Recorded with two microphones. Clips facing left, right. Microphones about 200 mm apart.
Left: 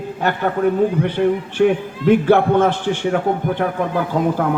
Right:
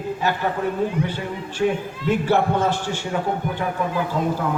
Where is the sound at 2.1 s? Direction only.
55° left (ahead or behind).